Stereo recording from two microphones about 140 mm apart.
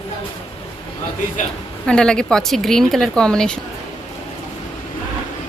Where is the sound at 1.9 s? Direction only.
5° left (ahead or behind).